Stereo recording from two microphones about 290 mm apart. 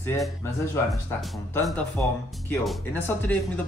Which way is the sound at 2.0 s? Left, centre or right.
Centre.